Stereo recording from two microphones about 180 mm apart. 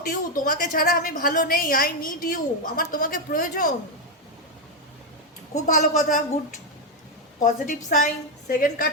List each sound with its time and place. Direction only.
0.1 s a woman's voice: 50° left (ahead or behind)
5.6 s a woman's voice: 45° left (ahead or behind)
7.4 s a woman's voice: 45° left (ahead or behind)